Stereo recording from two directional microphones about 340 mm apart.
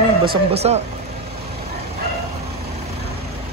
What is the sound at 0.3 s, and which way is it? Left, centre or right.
Speech, centre.